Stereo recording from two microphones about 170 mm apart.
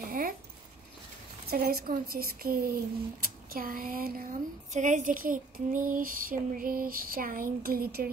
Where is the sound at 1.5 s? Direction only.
60° right (ahead or behind).